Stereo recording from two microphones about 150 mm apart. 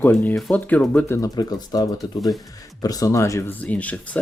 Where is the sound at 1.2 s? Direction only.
25° left (ahead or behind).